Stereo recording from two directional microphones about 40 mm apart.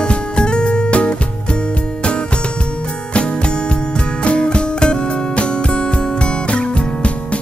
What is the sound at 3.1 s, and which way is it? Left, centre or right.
Music, left.